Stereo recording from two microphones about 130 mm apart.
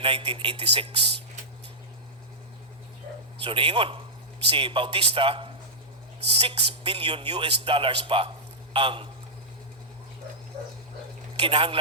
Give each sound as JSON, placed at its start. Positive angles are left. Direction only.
{"t": 0.0, "sound": "a man's voice", "side_deg": -45}
{"t": 3.4, "sound": "a man's voice", "side_deg": -45}
{"t": 11.3, "sound": "speech", "side_deg": -40}